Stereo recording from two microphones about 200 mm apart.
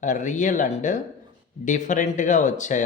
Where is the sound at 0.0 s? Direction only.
40° left (ahead or behind).